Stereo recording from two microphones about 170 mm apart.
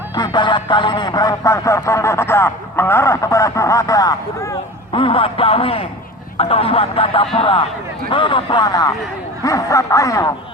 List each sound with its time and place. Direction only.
0.1 s speech: 25° left (ahead or behind)
4.9 s a man's voice: 30° left (ahead or behind)